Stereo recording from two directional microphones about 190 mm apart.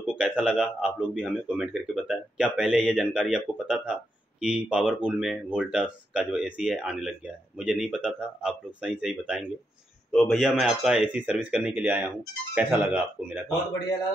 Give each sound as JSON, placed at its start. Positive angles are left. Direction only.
{"t": 0.2, "sound": "a man's voice", "side_deg": -5}